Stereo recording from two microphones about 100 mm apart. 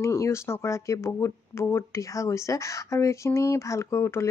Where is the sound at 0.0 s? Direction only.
30° left (ahead or behind).